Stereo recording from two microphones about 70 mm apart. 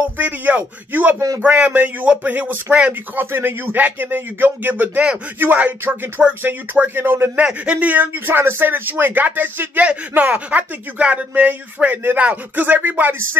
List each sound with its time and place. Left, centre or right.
0.0 s speech: right
7.3 s speech: centre